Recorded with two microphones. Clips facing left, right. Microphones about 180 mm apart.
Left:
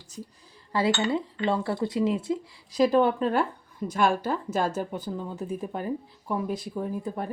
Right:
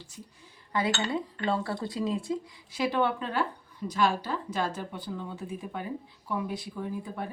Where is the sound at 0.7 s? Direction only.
30° left (ahead or behind).